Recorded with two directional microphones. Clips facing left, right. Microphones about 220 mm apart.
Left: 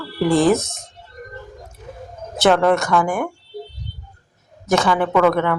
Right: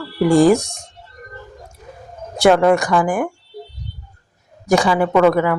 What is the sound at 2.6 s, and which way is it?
Speech, 15° right (ahead or behind).